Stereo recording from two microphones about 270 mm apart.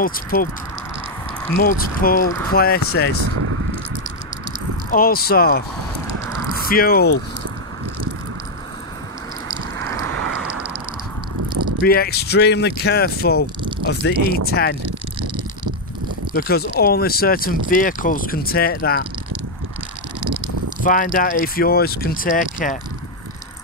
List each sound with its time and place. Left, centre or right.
0.0 s speech: left
1.6 s speech: left
4.9 s speech: left
6.7 s speech: left
9.8 s vehicle: centre
10.0 s vehicle: right
10.4 s a sound: centre
11.8 s speech: left
16.3 s speech: left
20.8 s speech: left